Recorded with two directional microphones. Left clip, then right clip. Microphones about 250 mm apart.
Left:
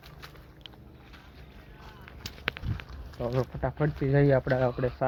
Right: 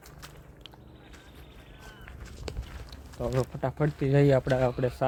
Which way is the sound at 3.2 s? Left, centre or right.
Centre.